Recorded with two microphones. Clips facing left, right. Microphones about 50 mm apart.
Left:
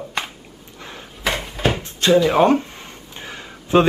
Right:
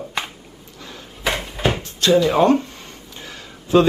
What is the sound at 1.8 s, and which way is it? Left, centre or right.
Drawer open or close, left.